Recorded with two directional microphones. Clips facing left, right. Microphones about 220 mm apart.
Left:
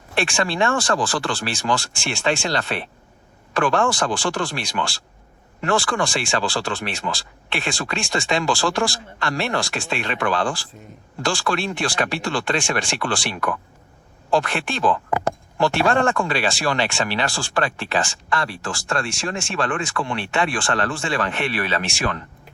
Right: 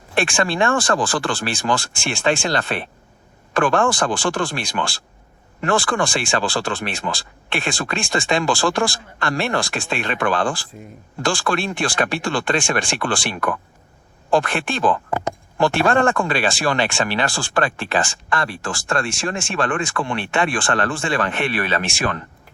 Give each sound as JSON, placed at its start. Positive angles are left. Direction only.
{"t": 0.1, "sound": "speech", "side_deg": -50}